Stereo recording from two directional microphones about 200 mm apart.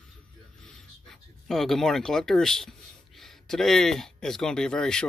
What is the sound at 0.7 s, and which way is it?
Speech, centre (ahead or behind).